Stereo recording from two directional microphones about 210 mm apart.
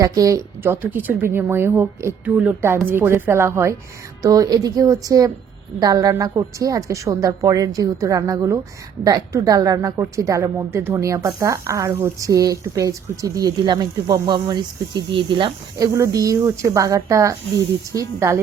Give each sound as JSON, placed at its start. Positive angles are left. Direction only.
{"t": 0.0, "sound": "a woman's voice", "side_deg": -15}